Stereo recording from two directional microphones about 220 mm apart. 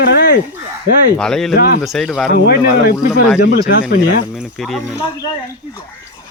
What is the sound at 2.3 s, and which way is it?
Speech, 50° left (ahead or behind).